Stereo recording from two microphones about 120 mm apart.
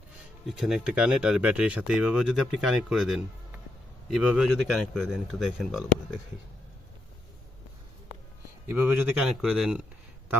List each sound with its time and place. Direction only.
0.4 s speech: 5° right (ahead or behind)
8.6 s speech: 15° right (ahead or behind)
9.2 s speech: 5° right (ahead or behind)